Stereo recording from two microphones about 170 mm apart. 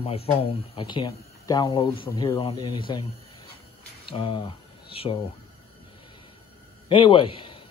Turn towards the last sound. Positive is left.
turn(degrees=30)  # may be behind; listen again after turning